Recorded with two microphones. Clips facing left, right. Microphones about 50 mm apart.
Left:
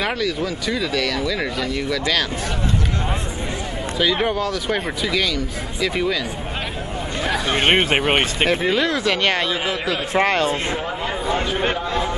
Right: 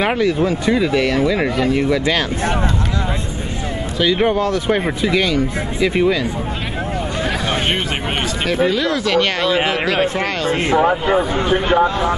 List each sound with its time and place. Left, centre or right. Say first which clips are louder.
0.0 s speech: right 6 dB; right
4.0 s speech: right 4 dB; centre
7.5 s speech: left 3 dB; left
9.6 s a man's voice: right 6 dB; right
10.1 s speech: left 2 dB; left
11.7 s speech: right 8 dB; right